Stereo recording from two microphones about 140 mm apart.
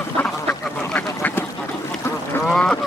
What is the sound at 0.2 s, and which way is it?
Duck, 10° left (ahead or behind).